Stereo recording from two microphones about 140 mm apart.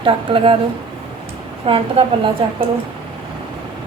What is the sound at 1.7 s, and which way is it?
Speech, 40° right (ahead or behind).